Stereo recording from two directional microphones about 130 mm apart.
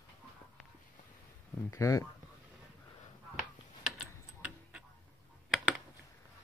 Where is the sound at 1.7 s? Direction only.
25° left (ahead or behind).